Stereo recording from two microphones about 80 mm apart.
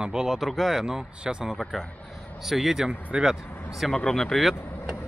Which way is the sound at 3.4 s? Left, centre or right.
Left.